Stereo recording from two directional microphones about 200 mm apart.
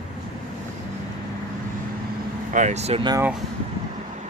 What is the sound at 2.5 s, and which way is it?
Speech, 35° right (ahead or behind).